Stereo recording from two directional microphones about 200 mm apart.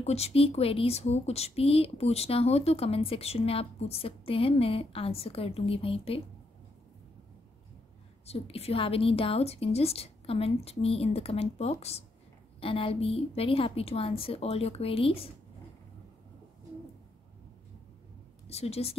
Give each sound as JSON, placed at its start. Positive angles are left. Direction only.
{"t": 0.0, "sound": "speech", "side_deg": 30}
{"t": 8.3, "sound": "speech", "side_deg": 30}
{"t": 18.5, "sound": "a woman's voice", "side_deg": 30}